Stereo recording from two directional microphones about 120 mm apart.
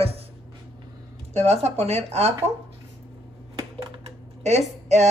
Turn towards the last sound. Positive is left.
turn(degrees=-70)  # may be behind; listen again after turning